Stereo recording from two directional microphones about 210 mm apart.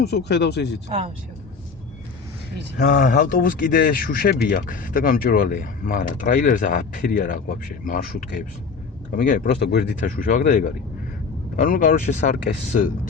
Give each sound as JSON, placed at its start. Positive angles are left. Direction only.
{"t": 0.0, "sound": "speech", "side_deg": 55}
{"t": 2.7, "sound": "speech", "side_deg": 45}
{"t": 9.1, "sound": "speech", "side_deg": 40}
{"t": 9.9, "sound": "speech", "side_deg": 40}